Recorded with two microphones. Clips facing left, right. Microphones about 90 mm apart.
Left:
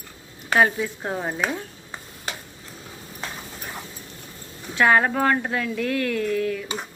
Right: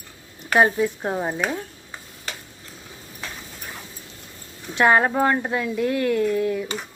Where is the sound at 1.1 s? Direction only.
5° right (ahead or behind).